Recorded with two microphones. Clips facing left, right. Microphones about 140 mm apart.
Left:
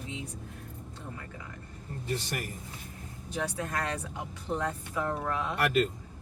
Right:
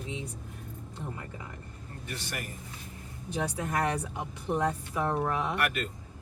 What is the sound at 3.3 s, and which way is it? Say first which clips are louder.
Speech: right 2 dB; 20° right (ahead or behind).